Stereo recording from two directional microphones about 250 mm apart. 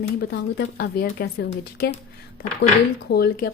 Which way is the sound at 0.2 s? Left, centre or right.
Left.